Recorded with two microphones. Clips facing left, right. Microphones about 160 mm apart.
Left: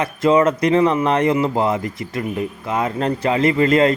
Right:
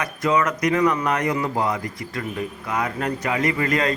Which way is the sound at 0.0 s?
25° left (ahead or behind).